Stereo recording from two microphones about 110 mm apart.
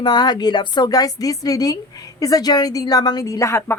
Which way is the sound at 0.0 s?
40° left (ahead or behind).